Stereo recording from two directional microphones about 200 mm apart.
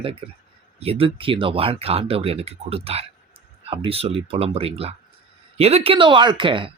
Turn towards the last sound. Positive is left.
turn(degrees=-25)  # may be behind; listen again after turning